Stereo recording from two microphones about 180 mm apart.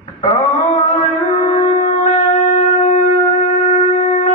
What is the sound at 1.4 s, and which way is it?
Shofar, 45° left (ahead or behind).